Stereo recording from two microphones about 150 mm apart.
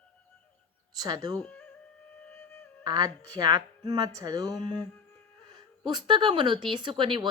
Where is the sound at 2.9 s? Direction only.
25° right (ahead or behind).